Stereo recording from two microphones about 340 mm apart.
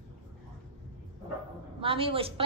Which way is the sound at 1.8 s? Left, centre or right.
Centre.